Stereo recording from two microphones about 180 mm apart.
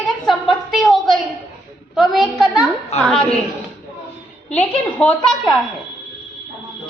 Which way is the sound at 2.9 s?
35° left (ahead or behind).